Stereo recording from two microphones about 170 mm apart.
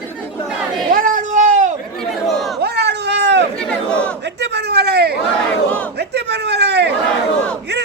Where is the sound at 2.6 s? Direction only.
75° right (ahead or behind).